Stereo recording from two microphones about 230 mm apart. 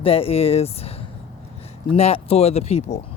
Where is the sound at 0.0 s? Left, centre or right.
Left.